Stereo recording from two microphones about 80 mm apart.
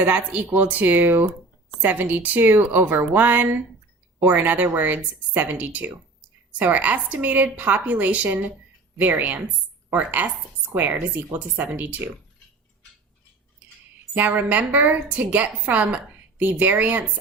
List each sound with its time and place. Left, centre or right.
0.0 s a woman's voice: centre
14.2 s a woman's voice: right